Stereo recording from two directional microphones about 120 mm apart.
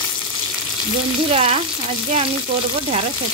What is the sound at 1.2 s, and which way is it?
Speech, 55° right (ahead or behind).